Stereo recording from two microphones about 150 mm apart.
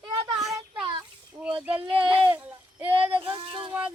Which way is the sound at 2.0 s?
35° right (ahead or behind).